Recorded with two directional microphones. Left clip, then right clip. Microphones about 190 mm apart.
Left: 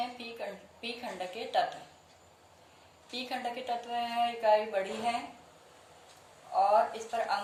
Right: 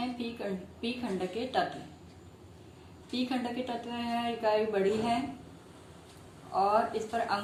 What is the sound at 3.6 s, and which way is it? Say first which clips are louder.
A woman's voice: left 3 dB; 30° left (ahead or behind).